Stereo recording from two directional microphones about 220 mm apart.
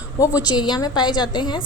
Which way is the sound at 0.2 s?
20° left (ahead or behind).